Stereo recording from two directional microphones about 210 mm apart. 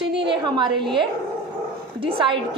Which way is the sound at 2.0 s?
25° right (ahead or behind).